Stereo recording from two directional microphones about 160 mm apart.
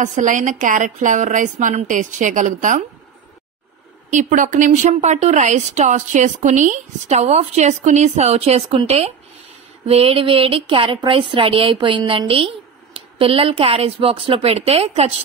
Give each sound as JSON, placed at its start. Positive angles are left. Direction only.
{"t": 0.0, "sound": "speech", "side_deg": -50}
{"t": 4.1, "sound": "speech", "side_deg": -50}